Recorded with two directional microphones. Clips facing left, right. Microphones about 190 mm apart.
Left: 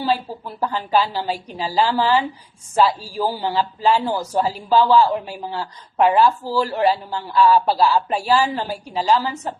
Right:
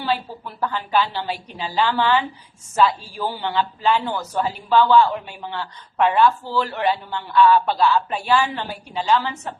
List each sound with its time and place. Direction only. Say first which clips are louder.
0.6 s a man's voice: left 2 dB; 30° left (ahead or behind)